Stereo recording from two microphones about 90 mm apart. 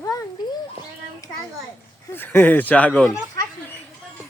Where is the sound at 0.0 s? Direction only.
40° left (ahead or behind).